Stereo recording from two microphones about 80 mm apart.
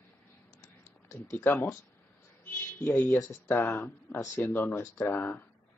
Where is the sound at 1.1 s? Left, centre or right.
Left.